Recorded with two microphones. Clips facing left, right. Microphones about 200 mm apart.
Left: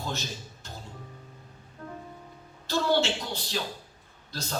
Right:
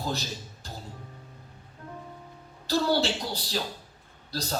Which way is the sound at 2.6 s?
35° right (ahead or behind).